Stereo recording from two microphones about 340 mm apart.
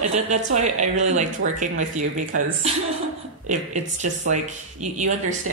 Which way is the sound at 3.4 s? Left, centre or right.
Right.